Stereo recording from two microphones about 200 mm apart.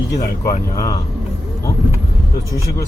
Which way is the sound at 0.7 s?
15° left (ahead or behind).